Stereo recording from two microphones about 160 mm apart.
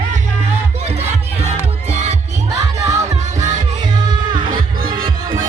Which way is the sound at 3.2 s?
50° right (ahead or behind).